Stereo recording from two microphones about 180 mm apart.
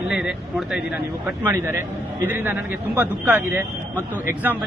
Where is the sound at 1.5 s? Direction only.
15° right (ahead or behind).